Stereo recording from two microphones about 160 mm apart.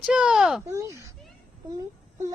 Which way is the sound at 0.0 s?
5° right (ahead or behind).